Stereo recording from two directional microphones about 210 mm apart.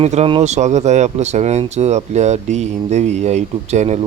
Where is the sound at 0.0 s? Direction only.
30° right (ahead or behind).